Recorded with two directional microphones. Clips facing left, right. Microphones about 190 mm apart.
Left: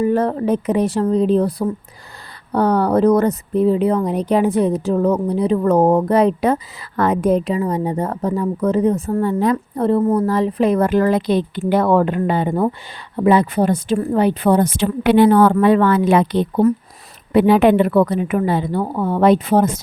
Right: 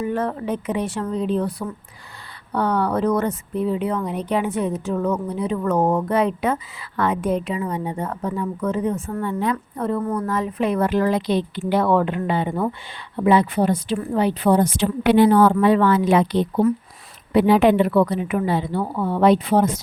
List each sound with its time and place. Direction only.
0.0 s a woman's voice: 35° left (ahead or behind)